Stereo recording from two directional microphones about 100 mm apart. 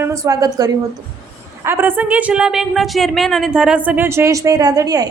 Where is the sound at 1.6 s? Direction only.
25° right (ahead or behind); by 3.5 s centre (ahead or behind).